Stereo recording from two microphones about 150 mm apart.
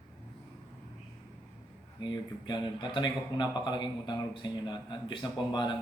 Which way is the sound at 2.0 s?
30° left (ahead or behind).